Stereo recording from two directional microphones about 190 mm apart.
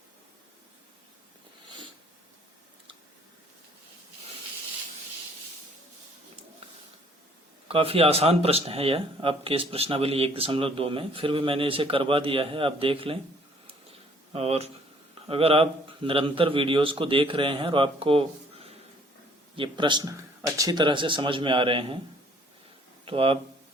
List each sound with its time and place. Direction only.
7.7 s speech: 30° right (ahead or behind)
14.3 s speech: 30° right (ahead or behind)
23.0 s speech: 30° right (ahead or behind)